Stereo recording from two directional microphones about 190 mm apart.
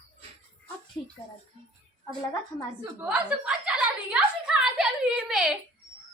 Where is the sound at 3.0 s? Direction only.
5° right (ahead or behind).